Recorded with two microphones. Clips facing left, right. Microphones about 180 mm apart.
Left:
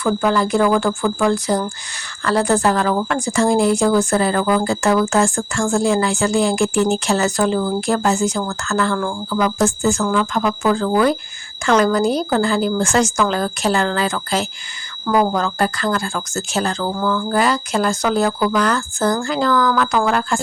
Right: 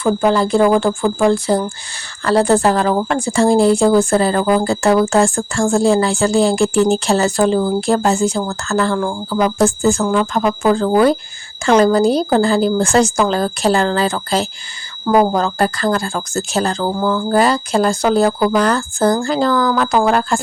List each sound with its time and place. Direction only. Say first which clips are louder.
0.0 s speech: right 3 dB; 30° right (ahead or behind)
15.0 s speech: right 4 dB; 20° right (ahead or behind)
15.3 s speech: right 3 dB; 35° right (ahead or behind)